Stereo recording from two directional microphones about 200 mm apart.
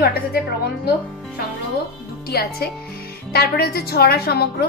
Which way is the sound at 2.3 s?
50° left (ahead or behind).